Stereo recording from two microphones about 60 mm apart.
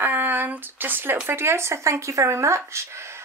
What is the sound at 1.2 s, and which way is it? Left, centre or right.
A woman's voice, right.